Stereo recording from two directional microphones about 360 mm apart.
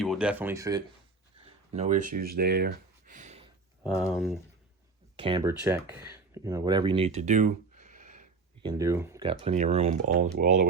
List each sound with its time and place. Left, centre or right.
0.0 s speech: centre
1.7 s speech: centre
3.8 s speech: centre
5.1 s speech: centre
8.8 s speech: centre